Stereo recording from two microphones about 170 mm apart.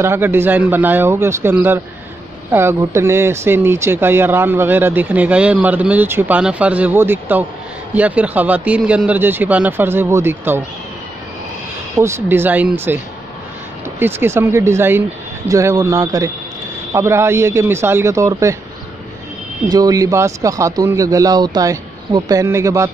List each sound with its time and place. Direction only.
0.0 s speech: 15° right (ahead or behind)
12.0 s speech: 15° right (ahead or behind)
19.7 s speech: 20° right (ahead or behind)